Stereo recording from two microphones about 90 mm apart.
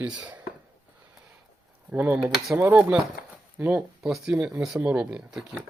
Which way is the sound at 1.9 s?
15° right (ahead or behind).